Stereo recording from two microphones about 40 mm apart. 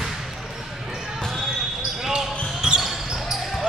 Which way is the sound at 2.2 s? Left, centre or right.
Centre.